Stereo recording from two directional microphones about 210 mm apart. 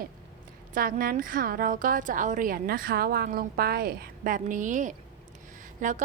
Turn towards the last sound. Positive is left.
turn(degrees=-35)  # may be behind; listen again after turning